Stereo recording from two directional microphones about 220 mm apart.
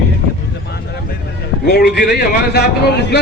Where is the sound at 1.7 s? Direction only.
50° left (ahead or behind).